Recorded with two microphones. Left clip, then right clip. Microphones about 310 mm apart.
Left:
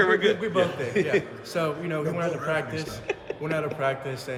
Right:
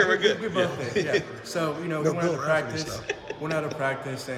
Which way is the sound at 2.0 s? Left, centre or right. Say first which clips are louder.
Right 5 dB; centre.